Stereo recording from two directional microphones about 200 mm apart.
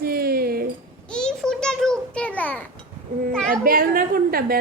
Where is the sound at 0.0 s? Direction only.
50° right (ahead or behind).